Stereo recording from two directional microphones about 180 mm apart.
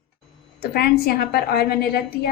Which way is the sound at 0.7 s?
60° left (ahead or behind).